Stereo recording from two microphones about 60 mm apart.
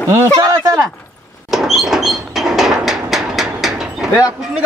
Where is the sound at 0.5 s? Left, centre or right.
Right.